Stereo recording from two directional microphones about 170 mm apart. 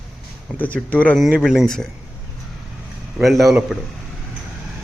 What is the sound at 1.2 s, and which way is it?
Speech, centre (ahead or behind).